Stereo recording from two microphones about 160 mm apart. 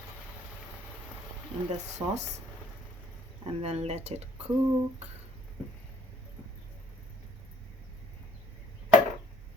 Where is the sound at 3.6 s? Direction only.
40° right (ahead or behind).